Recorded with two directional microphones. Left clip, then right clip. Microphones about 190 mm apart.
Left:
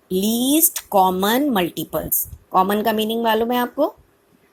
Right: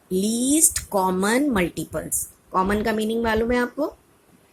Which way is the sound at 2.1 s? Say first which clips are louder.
Left 2 dB; centre (ahead or behind).